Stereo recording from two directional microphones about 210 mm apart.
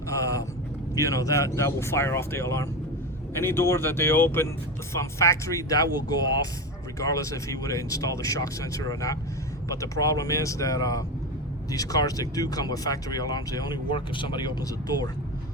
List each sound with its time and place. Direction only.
0.1 s vehicle: 15° left (ahead or behind)
0.9 s speech: 15° left (ahead or behind)